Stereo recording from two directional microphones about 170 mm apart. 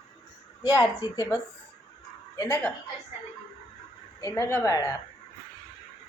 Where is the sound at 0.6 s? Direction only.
20° left (ahead or behind).